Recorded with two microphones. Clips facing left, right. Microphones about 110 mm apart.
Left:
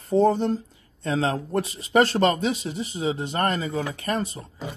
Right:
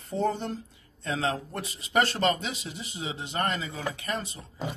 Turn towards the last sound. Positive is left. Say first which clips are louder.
# left 6 dB
turn(degrees=40)  # may be behind; listen again after turning